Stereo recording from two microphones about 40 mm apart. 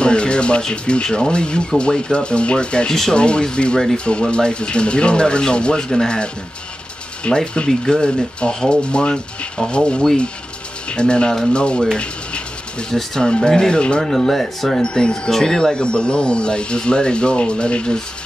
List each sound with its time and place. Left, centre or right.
0.0 s speech: left
2.9 s speech: centre
3.2 s speech: left
12.0 s a sound: left
12.9 s speech: centre
14.0 s speech: centre
14.8 s speech: left